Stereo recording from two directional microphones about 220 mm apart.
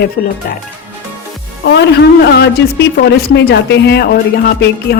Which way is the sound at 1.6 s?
50° left (ahead or behind).